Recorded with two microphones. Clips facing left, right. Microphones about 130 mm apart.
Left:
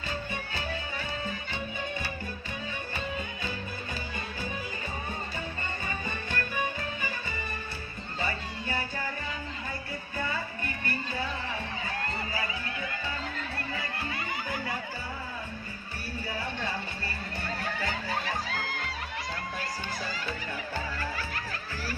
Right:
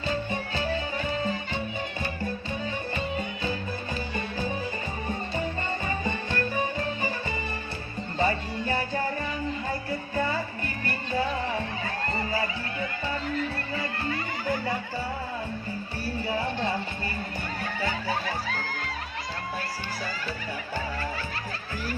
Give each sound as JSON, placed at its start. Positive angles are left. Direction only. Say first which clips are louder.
{"t": 0.3, "sound": "music", "louder": "right 6 dB", "side_deg": -30}
{"t": 5.9, "sound": "music", "louder": "right 5 dB", "side_deg": -35}
{"t": 10.2, "sound": "music", "louder": "right 6 dB", "side_deg": -35}